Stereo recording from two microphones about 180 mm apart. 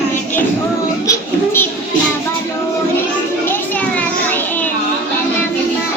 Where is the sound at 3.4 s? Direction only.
10° left (ahead or behind).